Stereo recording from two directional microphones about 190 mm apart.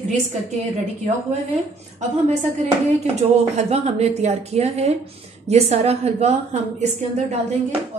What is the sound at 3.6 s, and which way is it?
Speech, 35° right (ahead or behind).